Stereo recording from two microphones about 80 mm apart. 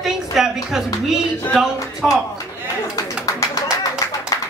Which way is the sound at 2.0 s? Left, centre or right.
Centre.